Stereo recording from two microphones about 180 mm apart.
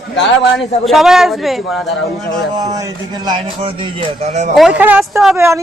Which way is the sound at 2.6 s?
20° right (ahead or behind).